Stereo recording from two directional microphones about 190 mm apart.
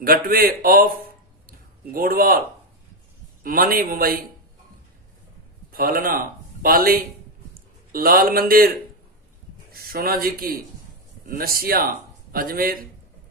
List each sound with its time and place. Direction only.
0.0 s speech: 50° right (ahead or behind)
3.4 s speech: 50° right (ahead or behind)
5.7 s a man's voice: 50° right (ahead or behind)